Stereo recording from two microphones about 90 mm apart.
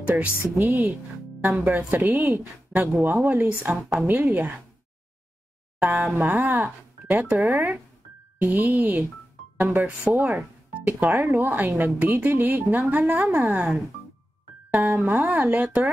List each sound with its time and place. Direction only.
0.0 s speech: 20° right (ahead or behind)
5.8 s speech: 20° right (ahead or behind)